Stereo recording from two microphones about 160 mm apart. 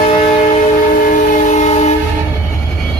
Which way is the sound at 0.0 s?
40° left (ahead or behind).